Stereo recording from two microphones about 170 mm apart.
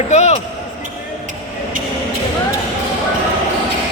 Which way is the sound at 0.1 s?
40° left (ahead or behind).